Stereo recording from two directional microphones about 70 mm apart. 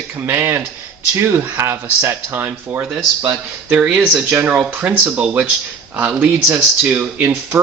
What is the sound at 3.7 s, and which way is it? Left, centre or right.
Speech, centre.